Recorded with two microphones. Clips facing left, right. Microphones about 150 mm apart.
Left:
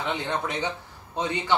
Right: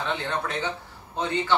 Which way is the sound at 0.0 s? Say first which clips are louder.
Even; 15° left (ahead or behind).